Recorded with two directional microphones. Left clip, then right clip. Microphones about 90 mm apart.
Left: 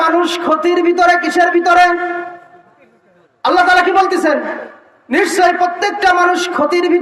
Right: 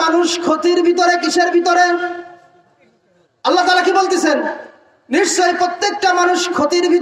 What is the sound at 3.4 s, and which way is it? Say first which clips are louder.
A woman's voice: left 3 dB; 35° right (ahead or behind).